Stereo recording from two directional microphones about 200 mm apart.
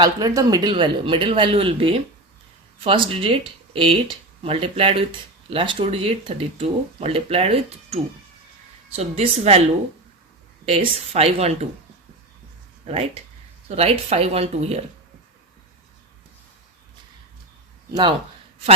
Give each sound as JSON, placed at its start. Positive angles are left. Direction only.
{"t": 0.0, "sound": "speech", "side_deg": -20}
{"t": 10.7, "sound": "speech", "side_deg": -30}
{"t": 12.8, "sound": "speech", "side_deg": -30}